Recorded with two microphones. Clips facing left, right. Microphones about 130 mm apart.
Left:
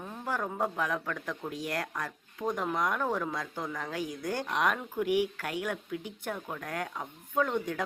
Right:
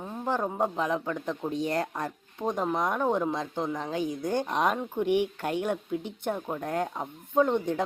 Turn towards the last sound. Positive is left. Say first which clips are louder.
# right 5 dB
turn(degrees=-25)  # may be behind; listen again after turning